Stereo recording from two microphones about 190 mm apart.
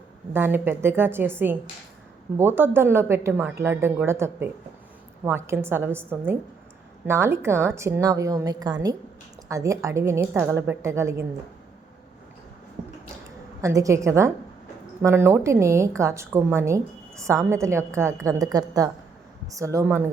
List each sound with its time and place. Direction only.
0.3 s a woman's voice: 10° right (ahead or behind)
2.4 s a woman's voice: 10° right (ahead or behind)
13.6 s a woman's voice: 15° right (ahead or behind)